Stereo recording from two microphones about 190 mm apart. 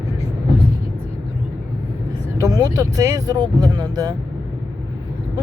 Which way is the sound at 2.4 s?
20° right (ahead or behind).